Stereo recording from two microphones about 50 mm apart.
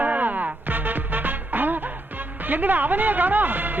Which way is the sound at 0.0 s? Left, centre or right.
Right.